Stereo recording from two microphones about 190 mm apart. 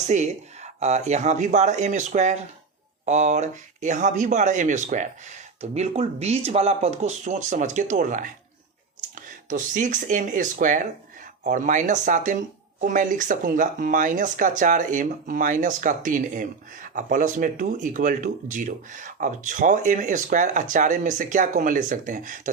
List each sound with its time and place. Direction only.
0.1 s speech: 35° right (ahead or behind)
9.5 s speech: 40° right (ahead or behind)